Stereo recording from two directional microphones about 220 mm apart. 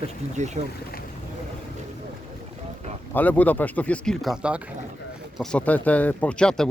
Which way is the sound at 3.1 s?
10° left (ahead or behind).